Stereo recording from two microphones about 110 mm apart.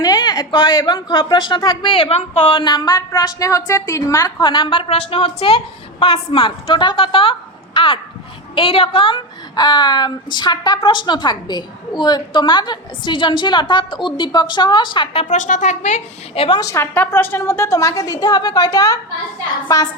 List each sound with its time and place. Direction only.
0.0 s a woman's voice: 40° left (ahead or behind)
1.9 s a woman's voice: 60° left (ahead or behind); by 4.3 s 30° left (ahead or behind)
4.4 s a woman's voice: 45° left (ahead or behind); by 16.6 s 60° left (ahead or behind)
16.6 s a woman's voice: 25° left (ahead or behind)